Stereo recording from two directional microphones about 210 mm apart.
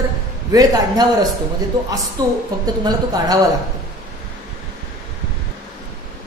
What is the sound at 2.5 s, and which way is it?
Speech, 20° right (ahead or behind).